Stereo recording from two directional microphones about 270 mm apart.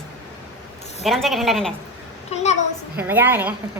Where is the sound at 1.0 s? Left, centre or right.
Centre.